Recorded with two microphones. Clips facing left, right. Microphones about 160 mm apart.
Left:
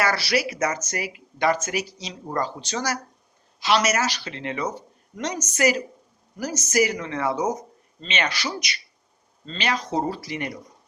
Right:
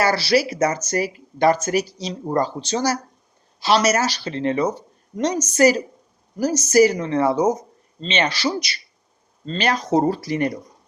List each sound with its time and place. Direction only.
0.0 s speech: 30° right (ahead or behind)